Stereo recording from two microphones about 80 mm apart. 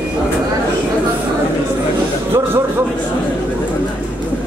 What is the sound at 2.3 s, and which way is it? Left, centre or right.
Speech, right.